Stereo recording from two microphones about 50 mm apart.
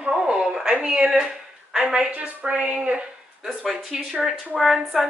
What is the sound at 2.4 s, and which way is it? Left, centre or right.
Speech, right.